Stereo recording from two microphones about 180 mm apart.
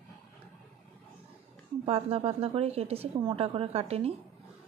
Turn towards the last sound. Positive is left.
turn(degrees=-35)  # may be behind; listen again after turning